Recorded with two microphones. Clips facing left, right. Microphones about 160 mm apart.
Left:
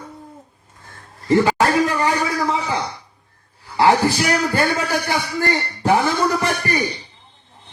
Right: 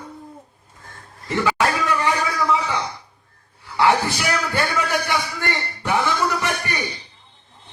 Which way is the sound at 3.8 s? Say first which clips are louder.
Left 3 dB; 30° left (ahead or behind).